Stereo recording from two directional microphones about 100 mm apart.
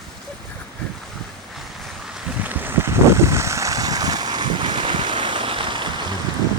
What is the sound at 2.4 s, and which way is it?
Boat, 20° right (ahead or behind).